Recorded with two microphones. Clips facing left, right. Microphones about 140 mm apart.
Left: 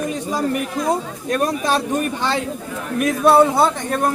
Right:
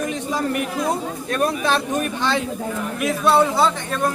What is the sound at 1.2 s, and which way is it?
Speech, 40° left (ahead or behind).